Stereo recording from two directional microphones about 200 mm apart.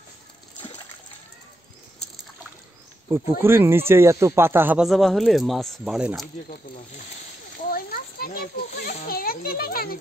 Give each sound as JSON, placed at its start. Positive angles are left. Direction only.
{"t": 3.1, "sound": "speech", "side_deg": -10}
{"t": 7.7, "sound": "a child's voice", "side_deg": 45}